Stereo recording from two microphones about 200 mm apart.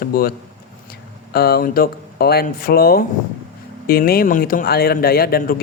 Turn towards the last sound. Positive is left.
turn(degrees=45)  # may be behind; listen again after turning